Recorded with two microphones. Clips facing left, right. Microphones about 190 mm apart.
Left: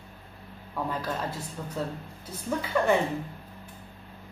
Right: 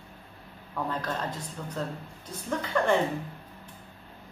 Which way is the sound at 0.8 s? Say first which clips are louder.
Even; 5° left (ahead or behind).